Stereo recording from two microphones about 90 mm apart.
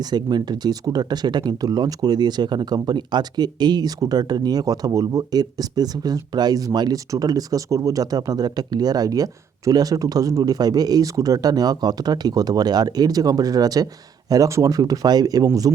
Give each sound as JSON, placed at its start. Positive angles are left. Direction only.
{"t": 0.0, "sound": "speech", "side_deg": -50}